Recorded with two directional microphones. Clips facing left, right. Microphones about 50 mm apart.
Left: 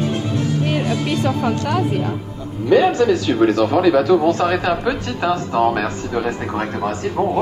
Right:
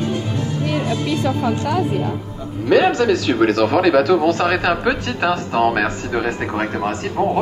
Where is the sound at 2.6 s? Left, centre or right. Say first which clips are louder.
Left 1 dB; right.